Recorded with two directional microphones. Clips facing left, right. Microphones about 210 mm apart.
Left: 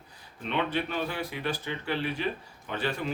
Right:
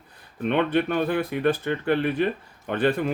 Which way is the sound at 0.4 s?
55° right (ahead or behind).